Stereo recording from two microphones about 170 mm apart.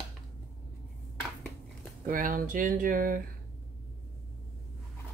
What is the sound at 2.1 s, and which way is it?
Speech, 55° right (ahead or behind).